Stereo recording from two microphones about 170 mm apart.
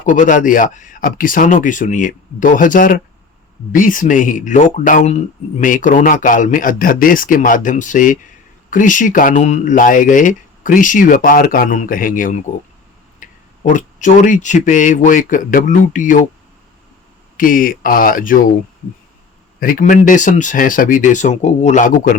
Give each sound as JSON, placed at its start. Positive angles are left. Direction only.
{"t": 0.0, "sound": "speech", "side_deg": 50}
{"t": 13.2, "sound": "a sound", "side_deg": 50}
{"t": 13.7, "sound": "speech", "side_deg": 50}
{"t": 17.3, "sound": "speech", "side_deg": 55}
{"t": 19.5, "sound": "speech", "side_deg": 55}